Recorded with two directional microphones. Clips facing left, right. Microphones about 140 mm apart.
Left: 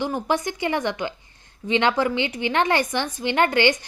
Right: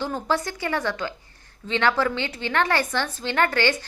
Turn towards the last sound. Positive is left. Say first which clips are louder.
# left 3 dB
turn(degrees=20)  # may be behind; listen again after turning